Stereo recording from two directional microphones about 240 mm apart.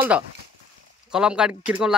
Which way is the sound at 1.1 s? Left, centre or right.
Centre.